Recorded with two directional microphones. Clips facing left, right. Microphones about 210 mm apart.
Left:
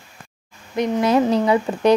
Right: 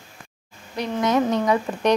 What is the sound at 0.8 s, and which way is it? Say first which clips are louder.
Speech: left 4 dB; 30° left (ahead or behind).